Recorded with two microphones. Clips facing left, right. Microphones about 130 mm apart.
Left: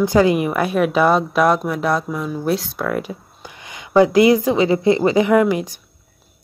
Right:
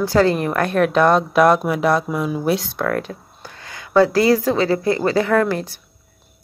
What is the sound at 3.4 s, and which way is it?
Speech, 15° left (ahead or behind).